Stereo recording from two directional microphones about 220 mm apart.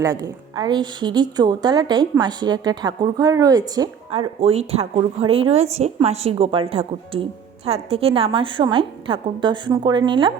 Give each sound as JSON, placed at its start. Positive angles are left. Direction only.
{"t": 0.0, "sound": "a woman's voice", "side_deg": -15}